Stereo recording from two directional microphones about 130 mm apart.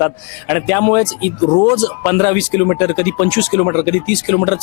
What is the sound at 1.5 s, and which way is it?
Speech, 30° left (ahead or behind).